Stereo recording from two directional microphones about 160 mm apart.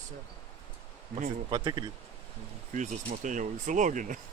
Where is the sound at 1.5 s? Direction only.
30° right (ahead or behind).